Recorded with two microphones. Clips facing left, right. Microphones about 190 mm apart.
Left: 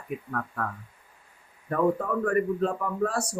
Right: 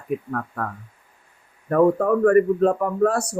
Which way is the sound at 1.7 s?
55° right (ahead or behind).